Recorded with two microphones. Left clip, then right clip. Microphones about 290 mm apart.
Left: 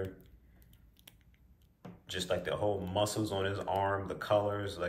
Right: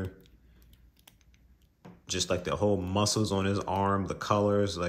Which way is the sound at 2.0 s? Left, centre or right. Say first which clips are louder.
Right 4 dB; centre.